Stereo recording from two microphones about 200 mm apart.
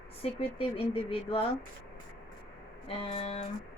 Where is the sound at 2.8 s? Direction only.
30° left (ahead or behind).